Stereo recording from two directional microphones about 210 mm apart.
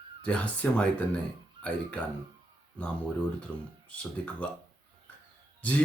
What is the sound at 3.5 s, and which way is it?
Speech, 5° left (ahead or behind).